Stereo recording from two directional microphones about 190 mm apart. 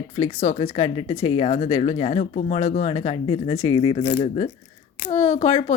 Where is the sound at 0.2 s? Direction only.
35° left (ahead or behind).